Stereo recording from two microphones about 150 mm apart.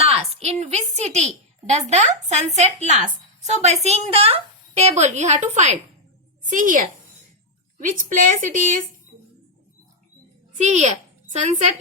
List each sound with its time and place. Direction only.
0.0 s a woman's voice: 40° right (ahead or behind); by 8.8 s 60° right (ahead or behind)
10.6 s a woman's voice: 50° right (ahead or behind)